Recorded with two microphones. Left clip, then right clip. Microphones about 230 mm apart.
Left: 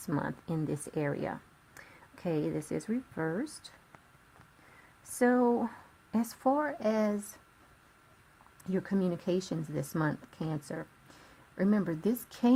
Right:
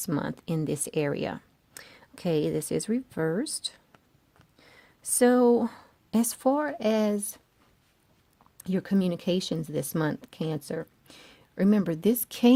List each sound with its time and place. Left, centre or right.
0.0 s speech: right
5.1 s speech: right
8.6 s speech: right